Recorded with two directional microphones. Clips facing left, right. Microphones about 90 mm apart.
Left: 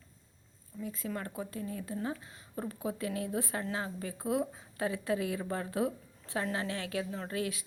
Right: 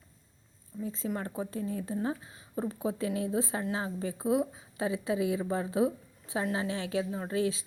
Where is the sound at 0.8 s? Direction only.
30° right (ahead or behind).